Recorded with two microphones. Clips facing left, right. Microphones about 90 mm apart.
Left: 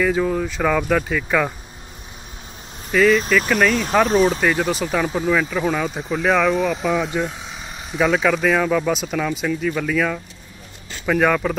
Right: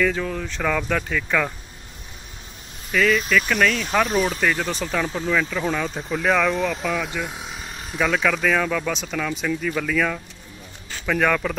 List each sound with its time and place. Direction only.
0.0 s speech: 15° left (ahead or behind)
2.9 s speech: 20° left (ahead or behind)
3.3 s speech: 5° left (ahead or behind)
4.0 s speech: 25° left (ahead or behind)
4.4 s speech: 15° left (ahead or behind)